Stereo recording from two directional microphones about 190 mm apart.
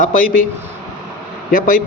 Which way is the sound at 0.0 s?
45° left (ahead or behind).